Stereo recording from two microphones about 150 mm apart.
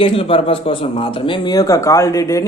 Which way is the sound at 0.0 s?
35° left (ahead or behind).